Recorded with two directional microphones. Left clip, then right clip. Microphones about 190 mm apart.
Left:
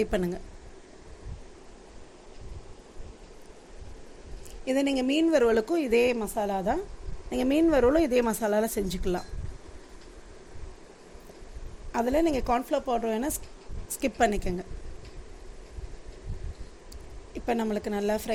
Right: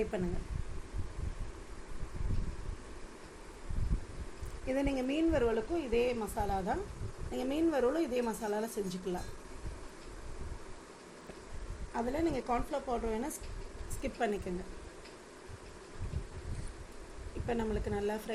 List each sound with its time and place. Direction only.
4.6 s a woman's voice: 35° left (ahead or behind); by 9.2 s 55° left (ahead or behind)
11.9 s a woman's voice: 55° left (ahead or behind)
17.4 s speech: 55° left (ahead or behind)